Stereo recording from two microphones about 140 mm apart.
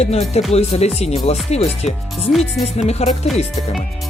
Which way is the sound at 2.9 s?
50° left (ahead or behind).